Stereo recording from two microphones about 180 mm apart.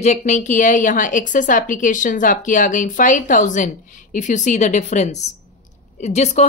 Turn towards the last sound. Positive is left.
turn(degrees=40)  # may be behind; listen again after turning